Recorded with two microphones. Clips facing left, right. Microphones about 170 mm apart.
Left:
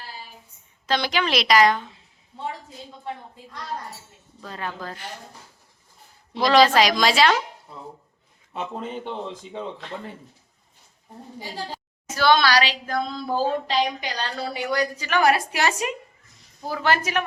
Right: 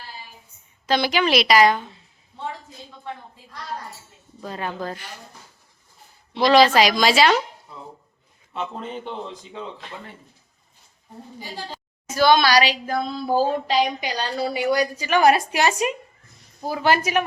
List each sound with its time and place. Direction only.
0.9 s a woman's voice: 10° right (ahead or behind)
4.4 s a woman's voice: 20° right (ahead or behind)
6.4 s a woman's voice: 5° right (ahead or behind)
12.1 s a woman's voice: 15° right (ahead or behind)